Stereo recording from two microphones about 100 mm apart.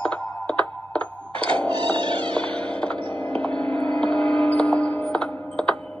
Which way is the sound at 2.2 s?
10° left (ahead or behind).